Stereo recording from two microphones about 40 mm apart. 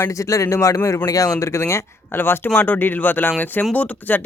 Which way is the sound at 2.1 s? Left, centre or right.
Left.